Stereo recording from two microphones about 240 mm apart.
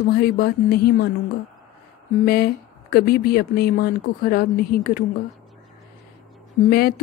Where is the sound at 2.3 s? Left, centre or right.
Left.